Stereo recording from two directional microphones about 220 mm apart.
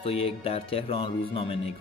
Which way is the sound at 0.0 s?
25° left (ahead or behind).